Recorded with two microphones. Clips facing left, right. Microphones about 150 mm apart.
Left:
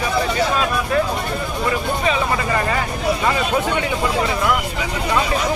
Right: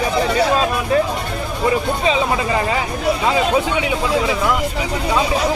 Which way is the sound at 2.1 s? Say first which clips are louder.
Right 2 dB; 15° right (ahead or behind).